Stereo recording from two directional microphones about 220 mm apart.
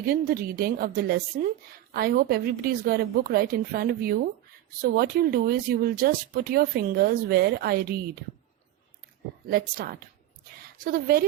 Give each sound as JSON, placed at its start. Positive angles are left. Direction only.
{"t": 0.0, "sound": "speech", "side_deg": -40}
{"t": 9.5, "sound": "speech", "side_deg": -45}